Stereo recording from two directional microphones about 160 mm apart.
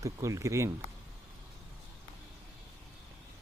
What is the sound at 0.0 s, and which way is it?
Speech, 20° right (ahead or behind).